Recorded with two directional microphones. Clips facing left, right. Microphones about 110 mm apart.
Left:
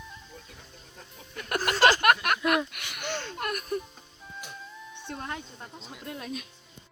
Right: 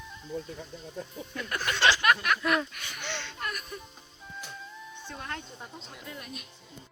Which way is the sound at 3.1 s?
45° left (ahead or behind).